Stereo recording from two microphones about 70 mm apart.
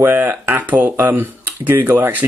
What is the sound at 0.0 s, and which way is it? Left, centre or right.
Speech, right.